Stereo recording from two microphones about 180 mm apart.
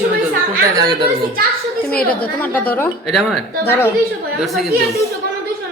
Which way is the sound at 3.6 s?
10° left (ahead or behind).